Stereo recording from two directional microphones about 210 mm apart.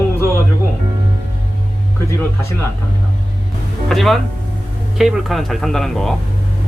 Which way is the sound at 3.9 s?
Centre (ahead or behind).